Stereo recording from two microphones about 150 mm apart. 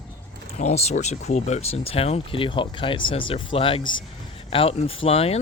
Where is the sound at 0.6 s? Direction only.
50° left (ahead or behind).